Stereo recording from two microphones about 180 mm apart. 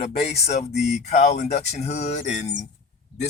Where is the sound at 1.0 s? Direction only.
40° left (ahead or behind).